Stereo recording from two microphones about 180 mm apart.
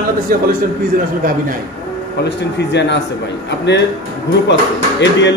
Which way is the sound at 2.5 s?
75° left (ahead or behind).